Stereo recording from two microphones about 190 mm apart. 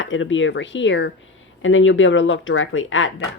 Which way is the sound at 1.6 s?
90° left.